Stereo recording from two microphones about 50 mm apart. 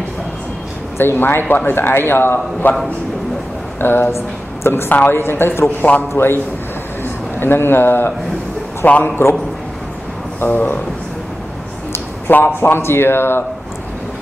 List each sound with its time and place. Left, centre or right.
0.9 s speech: left
3.8 s speech: left
8.8 s a man's voice: left
10.4 s speech: left
12.3 s speech: left